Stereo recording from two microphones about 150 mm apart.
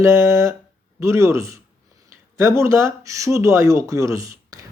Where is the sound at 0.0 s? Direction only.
20° right (ahead or behind).